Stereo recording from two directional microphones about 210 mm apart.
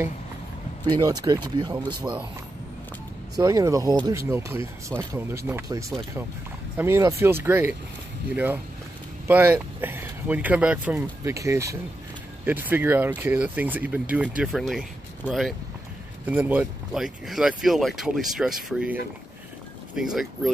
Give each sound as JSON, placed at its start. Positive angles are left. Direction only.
{"t": 0.8, "sound": "speech", "side_deg": -20}
{"t": 3.3, "sound": "speech", "side_deg": -15}
{"t": 9.3, "sound": "speech", "side_deg": -10}
{"t": 20.0, "sound": "speech", "side_deg": 0}